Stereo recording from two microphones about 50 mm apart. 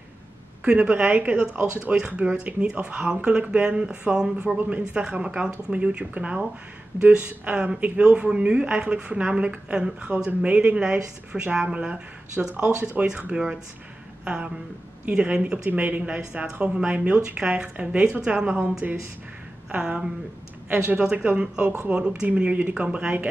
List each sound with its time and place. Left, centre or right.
0.7 s a woman's voice: right
7.5 s speech: centre
7.8 s a woman's voice: right
17.2 s speech: centre
17.7 s a woman's voice: right
19.7 s speech: centre
21.2 s a woman's voice: right
22.4 s speech: right
22.8 s a woman's voice: right